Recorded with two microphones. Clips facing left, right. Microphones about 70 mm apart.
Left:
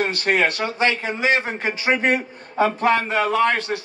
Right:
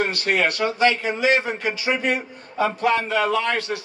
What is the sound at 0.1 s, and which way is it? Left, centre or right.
A man's voice, left.